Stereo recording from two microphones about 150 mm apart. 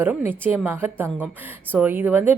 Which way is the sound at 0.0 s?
15° right (ahead or behind).